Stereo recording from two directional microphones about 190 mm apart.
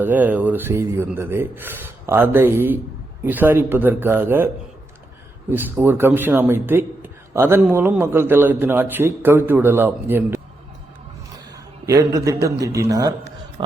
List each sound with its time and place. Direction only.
0.0 s a man's voice: 10° right (ahead or behind)
5.8 s a man's voice: 10° right (ahead or behind)
11.5 s a man's voice: 20° right (ahead or behind)